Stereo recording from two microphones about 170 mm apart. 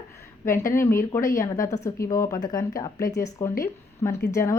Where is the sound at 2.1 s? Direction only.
20° left (ahead or behind).